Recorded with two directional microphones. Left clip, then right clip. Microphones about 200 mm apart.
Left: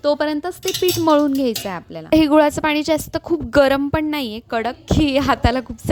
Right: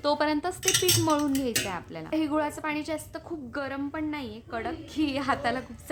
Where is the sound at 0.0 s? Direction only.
30° left (ahead or behind).